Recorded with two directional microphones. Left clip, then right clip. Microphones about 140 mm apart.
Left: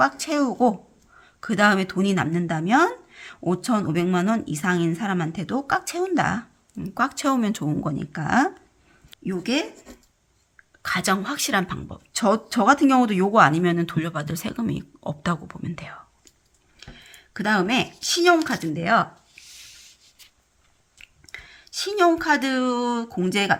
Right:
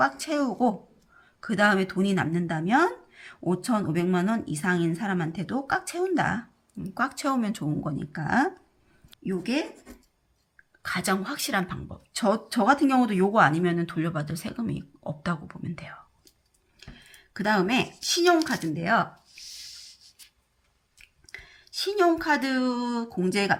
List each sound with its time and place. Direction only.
0.0 s a woman's voice: 30° left (ahead or behind)
21.0 s speech: 25° left (ahead or behind)